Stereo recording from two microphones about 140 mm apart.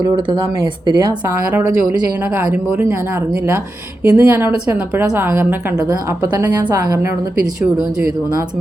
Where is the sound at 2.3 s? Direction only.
15° right (ahead or behind).